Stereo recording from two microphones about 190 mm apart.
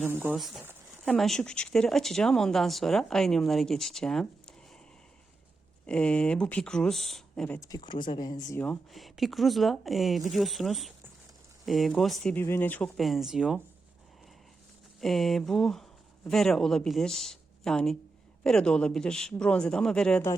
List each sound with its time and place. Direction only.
0.1 s speech: 10° right (ahead or behind)
5.8 s speech: 5° left (ahead or behind)
7.7 s speech: 25° left (ahead or behind)
8.6 s speech: 5° left (ahead or behind)
15.0 s speech: centre (ahead or behind)